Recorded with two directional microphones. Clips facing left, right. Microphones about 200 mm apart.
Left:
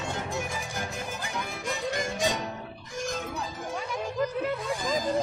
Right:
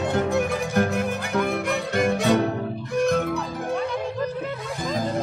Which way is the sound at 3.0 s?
60° right (ahead or behind).